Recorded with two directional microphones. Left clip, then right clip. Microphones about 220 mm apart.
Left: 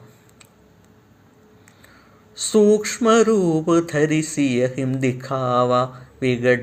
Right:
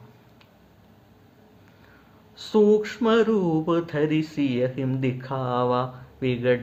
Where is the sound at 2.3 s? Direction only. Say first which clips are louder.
Left 3 dB; 15° left (ahead or behind).